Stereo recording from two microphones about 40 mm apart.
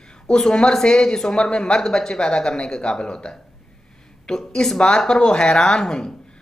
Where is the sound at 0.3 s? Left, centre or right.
Centre.